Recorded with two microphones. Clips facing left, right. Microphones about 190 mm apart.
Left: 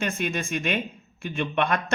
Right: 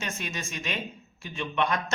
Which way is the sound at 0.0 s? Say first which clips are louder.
Left 8 dB; 55° left (ahead or behind).